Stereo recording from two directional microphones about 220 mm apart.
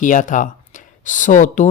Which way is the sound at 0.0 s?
35° left (ahead or behind).